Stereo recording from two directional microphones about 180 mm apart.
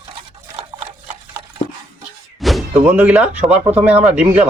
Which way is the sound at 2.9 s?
10° right (ahead or behind).